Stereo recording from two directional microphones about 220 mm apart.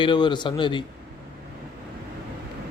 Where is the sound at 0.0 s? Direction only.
20° left (ahead or behind).